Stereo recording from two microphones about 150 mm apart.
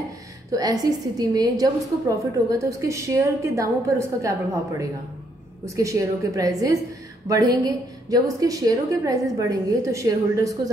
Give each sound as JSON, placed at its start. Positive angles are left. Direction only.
{"t": 0.5, "sound": "a woman's voice", "side_deg": -25}